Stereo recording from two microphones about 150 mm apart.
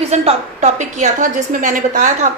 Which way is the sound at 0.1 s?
50° right (ahead or behind).